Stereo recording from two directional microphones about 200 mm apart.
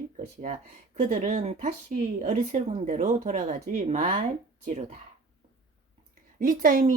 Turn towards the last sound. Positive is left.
turn(degrees=-45)  # may be behind; listen again after turning